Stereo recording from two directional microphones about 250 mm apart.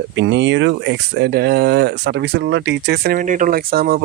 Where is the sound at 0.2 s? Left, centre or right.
Right.